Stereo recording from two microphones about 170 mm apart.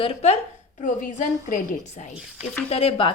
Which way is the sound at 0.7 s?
50° left (ahead or behind).